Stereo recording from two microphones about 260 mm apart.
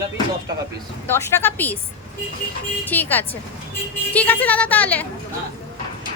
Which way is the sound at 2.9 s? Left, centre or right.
Centre.